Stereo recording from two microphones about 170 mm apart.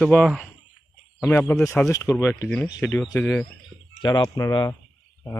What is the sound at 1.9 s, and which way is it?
Speech, 20° left (ahead or behind).